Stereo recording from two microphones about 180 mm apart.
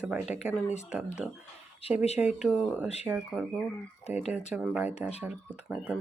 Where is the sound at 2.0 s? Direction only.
35° left (ahead or behind).